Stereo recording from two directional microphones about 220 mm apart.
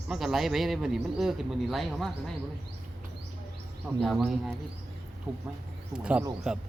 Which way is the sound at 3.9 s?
5° right (ahead or behind).